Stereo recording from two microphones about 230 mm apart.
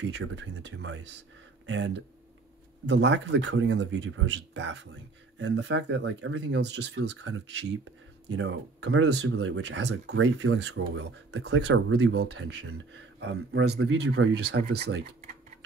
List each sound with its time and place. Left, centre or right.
0.1 s speech: right